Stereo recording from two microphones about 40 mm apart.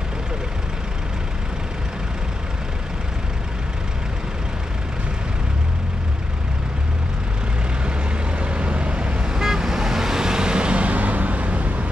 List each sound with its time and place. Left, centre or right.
8.4 s vehicle: right
9.2 s vehicle: centre; by 11.9 s right